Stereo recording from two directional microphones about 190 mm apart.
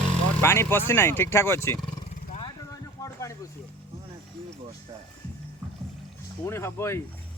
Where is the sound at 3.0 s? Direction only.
15° left (ahead or behind).